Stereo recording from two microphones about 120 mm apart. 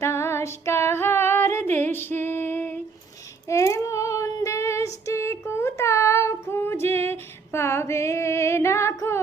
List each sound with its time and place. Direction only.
0.0 s female singing: 20° left (ahead or behind)
3.5 s child singing: 25° left (ahead or behind)